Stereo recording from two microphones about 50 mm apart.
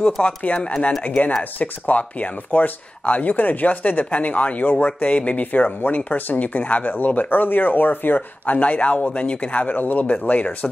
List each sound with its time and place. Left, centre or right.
0.0 s speech: left